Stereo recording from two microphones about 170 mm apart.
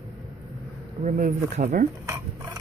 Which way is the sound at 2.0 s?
15° right (ahead or behind).